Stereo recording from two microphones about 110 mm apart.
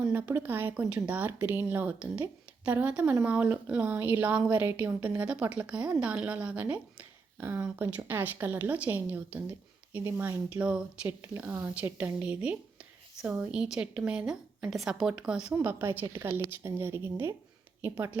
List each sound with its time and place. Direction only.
0.0 s a woman's voice: 20° right (ahead or behind)